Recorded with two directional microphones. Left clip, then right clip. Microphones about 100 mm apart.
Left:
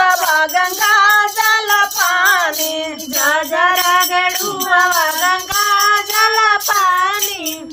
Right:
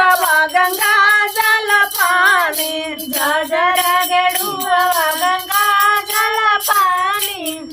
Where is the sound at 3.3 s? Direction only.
60° left (ahead or behind).